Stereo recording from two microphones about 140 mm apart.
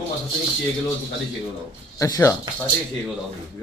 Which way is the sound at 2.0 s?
20° left (ahead or behind).